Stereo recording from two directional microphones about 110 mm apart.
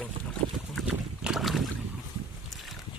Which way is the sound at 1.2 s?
Centre (ahead or behind).